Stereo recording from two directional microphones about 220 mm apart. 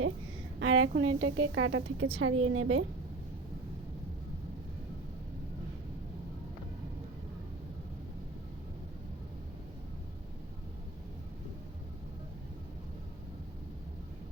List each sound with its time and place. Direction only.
0.6 s a woman's voice: 65° right (ahead or behind)